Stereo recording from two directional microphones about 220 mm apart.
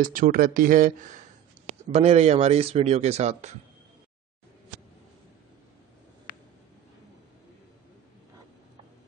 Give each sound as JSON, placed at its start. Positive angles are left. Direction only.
{"t": 0.0, "sound": "speech", "side_deg": -40}